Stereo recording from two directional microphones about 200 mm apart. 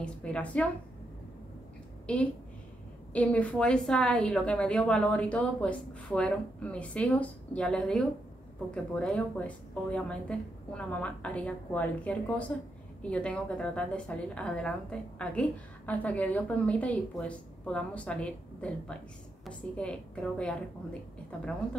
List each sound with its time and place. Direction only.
0.0 s a woman's voice: 5° left (ahead or behind)
2.1 s a woman's voice: 5° left (ahead or behind)